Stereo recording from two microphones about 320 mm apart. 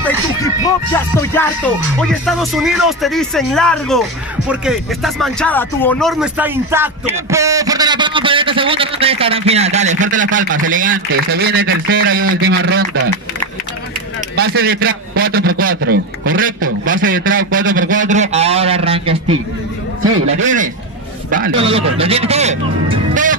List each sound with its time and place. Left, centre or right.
0.9 s music: centre
4.5 s speech: centre; by 13.1 s right
14.3 s speech: right
20.0 s a man's voice: right
20.4 s speech: right